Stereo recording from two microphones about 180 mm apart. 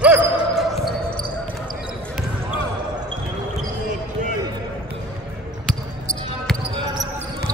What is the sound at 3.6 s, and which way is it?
Basketball bounce, 45° right (ahead or behind).